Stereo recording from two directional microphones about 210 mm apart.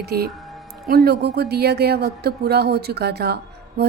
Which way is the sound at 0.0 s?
50° right (ahead or behind).